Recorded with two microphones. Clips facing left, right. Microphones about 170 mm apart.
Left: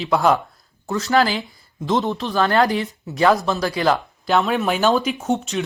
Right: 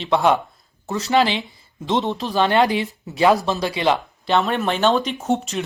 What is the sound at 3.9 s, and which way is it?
Speech, centre (ahead or behind).